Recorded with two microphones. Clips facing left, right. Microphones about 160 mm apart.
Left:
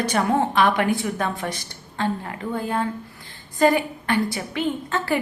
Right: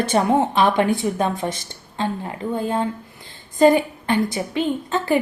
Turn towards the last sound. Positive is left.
turn(degrees=-20)  # may be behind; listen again after turning